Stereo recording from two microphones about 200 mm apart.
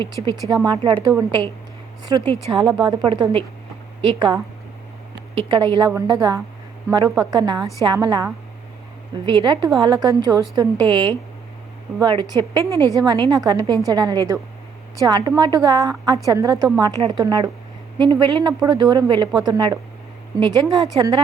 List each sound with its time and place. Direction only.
0.4 s a woman's voice: 20° right (ahead or behind)
2.2 s a woman's voice: 15° left (ahead or behind)
2.6 s a woman's voice: 20° right (ahead or behind)